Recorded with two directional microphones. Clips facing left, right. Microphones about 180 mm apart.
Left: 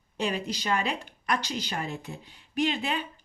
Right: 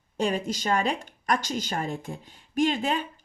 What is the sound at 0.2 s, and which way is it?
Speech, 45° right (ahead or behind).